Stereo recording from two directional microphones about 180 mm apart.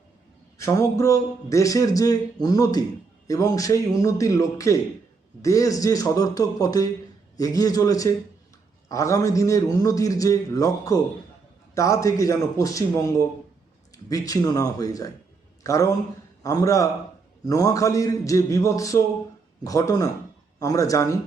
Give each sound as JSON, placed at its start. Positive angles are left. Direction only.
{"t": 0.6, "sound": "a man's voice", "side_deg": 15}